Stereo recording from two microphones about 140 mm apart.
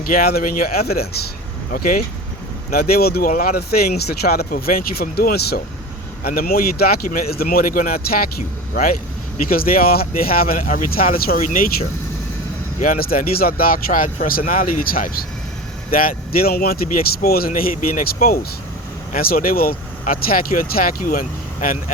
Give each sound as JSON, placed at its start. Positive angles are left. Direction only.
{"t": 0.0, "sound": "speech", "side_deg": 90}
{"t": 12.8, "sound": "speech", "side_deg": 85}
{"t": 19.1, "sound": "speech", "side_deg": 90}